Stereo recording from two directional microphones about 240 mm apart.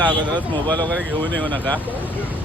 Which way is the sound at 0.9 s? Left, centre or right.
Centre.